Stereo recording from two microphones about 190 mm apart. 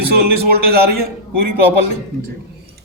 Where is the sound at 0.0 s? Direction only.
55° right (ahead or behind).